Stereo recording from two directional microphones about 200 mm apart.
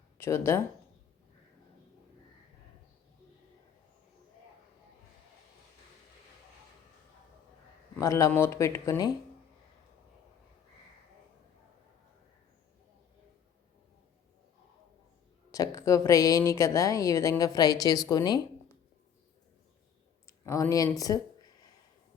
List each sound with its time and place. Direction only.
0.2 s speech: 15° left (ahead or behind)
7.9 s speech: 15° left (ahead or behind)
15.5 s speech: 15° left (ahead or behind)
20.2 s clicking: 15° left (ahead or behind)